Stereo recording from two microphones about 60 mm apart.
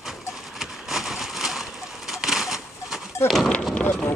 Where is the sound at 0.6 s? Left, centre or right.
Centre.